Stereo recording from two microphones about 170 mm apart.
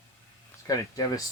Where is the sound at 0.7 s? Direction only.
20° left (ahead or behind).